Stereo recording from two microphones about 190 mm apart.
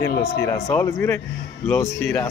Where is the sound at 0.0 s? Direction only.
15° left (ahead or behind).